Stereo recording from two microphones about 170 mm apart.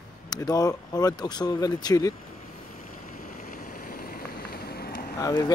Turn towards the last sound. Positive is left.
turn(degrees=20)  # may be behind; listen again after turning